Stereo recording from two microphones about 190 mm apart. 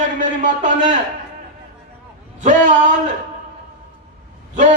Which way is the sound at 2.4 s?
40° right (ahead or behind).